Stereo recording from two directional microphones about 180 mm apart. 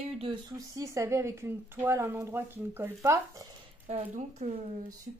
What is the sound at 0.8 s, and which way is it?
A woman's voice, 15° right (ahead or behind).